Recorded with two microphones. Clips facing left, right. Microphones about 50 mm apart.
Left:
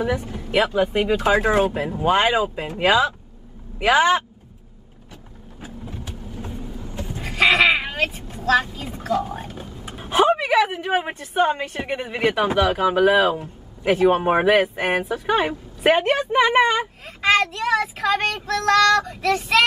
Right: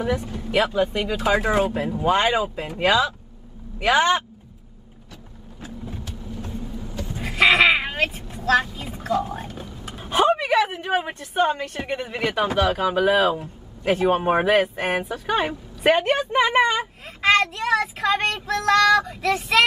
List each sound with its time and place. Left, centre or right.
0.2 s speech: left
6.0 s vehicle: centre
7.2 s sheep: centre
8.5 s speech: centre